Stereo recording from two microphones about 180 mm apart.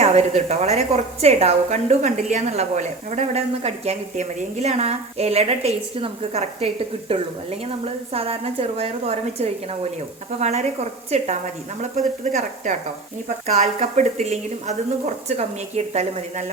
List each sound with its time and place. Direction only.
0.0 s a woman's voice: 35° right (ahead or behind)